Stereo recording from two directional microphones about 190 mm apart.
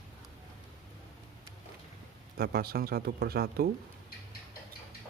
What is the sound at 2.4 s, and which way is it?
Speech, 55° right (ahead or behind).